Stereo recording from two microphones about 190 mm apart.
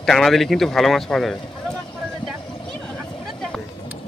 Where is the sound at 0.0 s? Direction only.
Centre (ahead or behind).